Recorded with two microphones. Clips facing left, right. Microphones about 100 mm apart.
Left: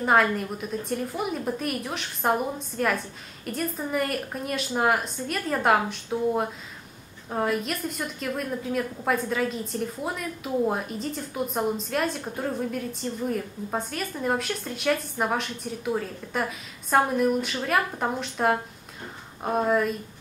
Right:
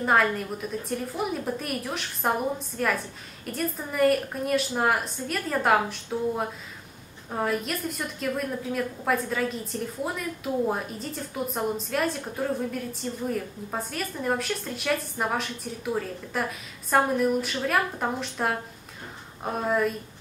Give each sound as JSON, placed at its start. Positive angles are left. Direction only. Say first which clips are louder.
{"t": 0.0, "sound": "a woman's voice", "louder": "left 1 dB", "side_deg": 0}